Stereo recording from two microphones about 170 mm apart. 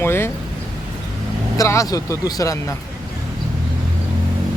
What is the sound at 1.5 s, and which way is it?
Speech, 20° left (ahead or behind).